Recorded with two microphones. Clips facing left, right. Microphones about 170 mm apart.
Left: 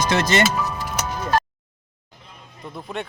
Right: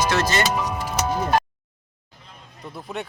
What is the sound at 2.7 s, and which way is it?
Speech, 5° right (ahead or behind).